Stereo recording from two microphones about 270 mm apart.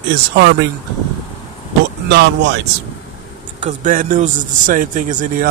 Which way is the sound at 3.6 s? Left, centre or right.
Right.